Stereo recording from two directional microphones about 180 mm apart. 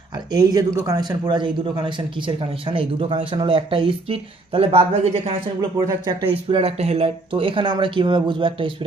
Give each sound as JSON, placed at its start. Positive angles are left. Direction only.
{"t": 0.3, "sound": "speech", "side_deg": -20}
{"t": 5.5, "sound": "speech", "side_deg": -20}
{"t": 6.3, "sound": "speech", "side_deg": -30}